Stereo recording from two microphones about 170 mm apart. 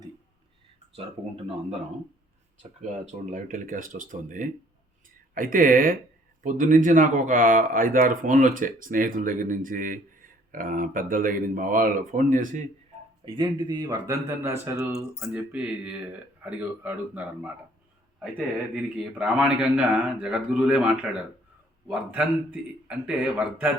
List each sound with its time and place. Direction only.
3.1 s speech: 45° right (ahead or behind)
13.2 s a man's voice: 25° right (ahead or behind); by 23.7 s 10° right (ahead or behind)